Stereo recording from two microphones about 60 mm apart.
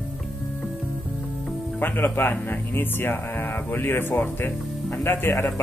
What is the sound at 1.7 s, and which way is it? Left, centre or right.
Speech, left.